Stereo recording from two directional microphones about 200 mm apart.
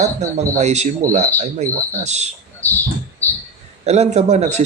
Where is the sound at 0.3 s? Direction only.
35° right (ahead or behind).